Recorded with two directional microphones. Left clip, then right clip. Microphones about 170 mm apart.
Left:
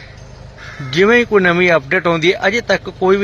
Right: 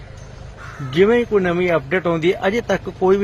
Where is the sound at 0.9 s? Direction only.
Centre (ahead or behind).